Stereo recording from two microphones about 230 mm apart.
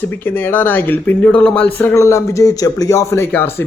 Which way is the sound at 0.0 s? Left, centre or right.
Centre.